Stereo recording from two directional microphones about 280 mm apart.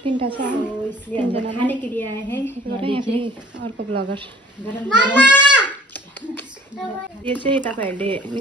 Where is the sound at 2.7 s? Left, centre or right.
Centre.